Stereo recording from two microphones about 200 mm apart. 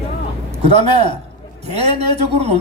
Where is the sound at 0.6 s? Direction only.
30° right (ahead or behind).